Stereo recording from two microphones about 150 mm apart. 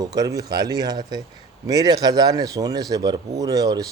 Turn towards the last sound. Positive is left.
turn(degrees=-25)  # may be behind; listen again after turning